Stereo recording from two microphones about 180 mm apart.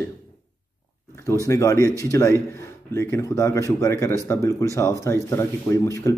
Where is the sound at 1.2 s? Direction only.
15° left (ahead or behind).